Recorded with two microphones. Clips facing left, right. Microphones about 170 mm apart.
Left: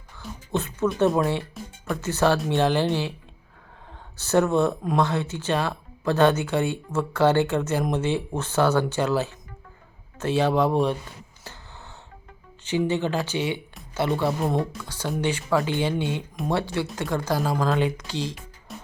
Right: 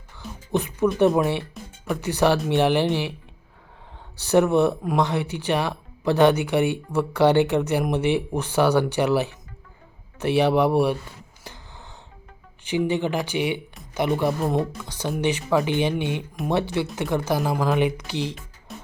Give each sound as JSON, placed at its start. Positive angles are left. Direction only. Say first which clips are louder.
{"t": 0.5, "sound": "speech", "louder": "right 3 dB", "side_deg": -15}
{"t": 4.2, "sound": "speech", "louder": "right 2 dB", "side_deg": -15}
{"t": 11.5, "sound": "a sound", "louder": "right 1 dB", "side_deg": -15}
{"t": 12.6, "sound": "speech", "louder": "right 1 dB", "side_deg": -15}
{"t": 18.7, "sound": "music", "louder": "right 1 dB", "side_deg": 0}